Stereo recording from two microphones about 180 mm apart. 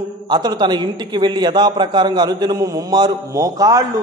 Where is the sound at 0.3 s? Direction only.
25° right (ahead or behind).